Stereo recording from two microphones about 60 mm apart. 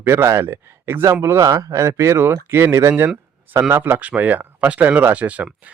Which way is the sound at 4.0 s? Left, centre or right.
Right.